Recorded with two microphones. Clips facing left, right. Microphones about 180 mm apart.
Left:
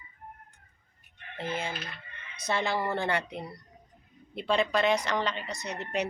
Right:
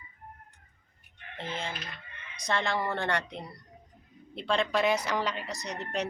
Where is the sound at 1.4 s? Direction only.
10° left (ahead or behind).